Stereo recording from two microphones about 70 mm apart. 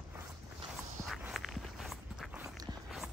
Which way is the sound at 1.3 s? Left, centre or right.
Centre.